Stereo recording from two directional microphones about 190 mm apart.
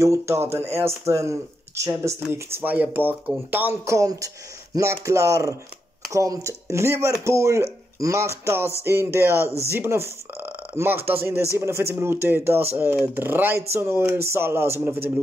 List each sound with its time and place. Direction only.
0.0 s speech: 15° right (ahead or behind)
9.4 s speech: 15° left (ahead or behind)
9.7 s speech: 15° right (ahead or behind)